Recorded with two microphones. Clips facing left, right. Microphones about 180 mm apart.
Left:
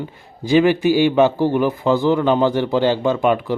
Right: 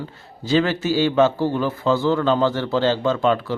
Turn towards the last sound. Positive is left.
turn(degrees=15)  # may be behind; listen again after turning